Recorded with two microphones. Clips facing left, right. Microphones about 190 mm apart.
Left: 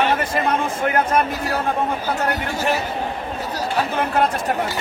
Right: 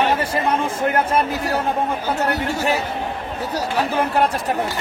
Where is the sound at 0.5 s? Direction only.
30° right (ahead or behind).